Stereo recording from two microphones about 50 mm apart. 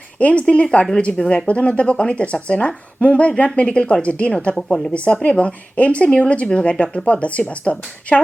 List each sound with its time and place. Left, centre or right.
0.2 s a woman's voice: left